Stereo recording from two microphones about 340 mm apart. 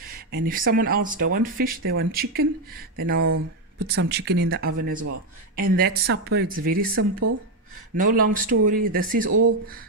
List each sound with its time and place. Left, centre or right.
0.5 s speech: right
7.0 s speech: right
8.0 s speech: right